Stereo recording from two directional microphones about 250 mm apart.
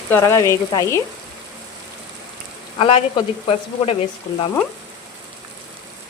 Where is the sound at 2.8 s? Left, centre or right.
Left.